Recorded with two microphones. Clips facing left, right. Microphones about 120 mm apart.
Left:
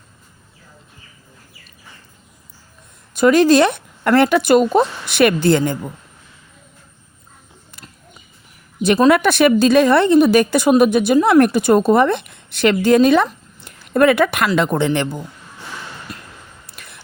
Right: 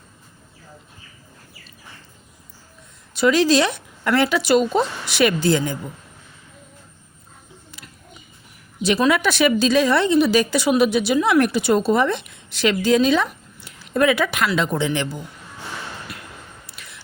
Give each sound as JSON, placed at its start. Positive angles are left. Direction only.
{"t": 3.2, "sound": "a woman's voice", "side_deg": 50}
{"t": 8.8, "sound": "a woman's voice", "side_deg": 50}
{"t": 16.6, "sound": "a sound", "side_deg": 55}